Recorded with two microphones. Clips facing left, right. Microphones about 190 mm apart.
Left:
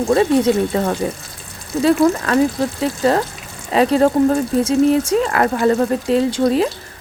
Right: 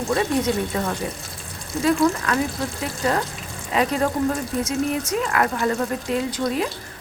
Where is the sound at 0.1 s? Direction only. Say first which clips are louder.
Left 7 dB; 30° left (ahead or behind).